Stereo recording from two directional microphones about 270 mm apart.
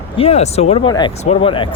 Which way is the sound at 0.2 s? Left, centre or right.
Left.